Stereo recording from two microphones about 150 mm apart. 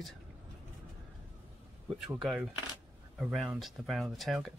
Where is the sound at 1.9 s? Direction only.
Centre (ahead or behind).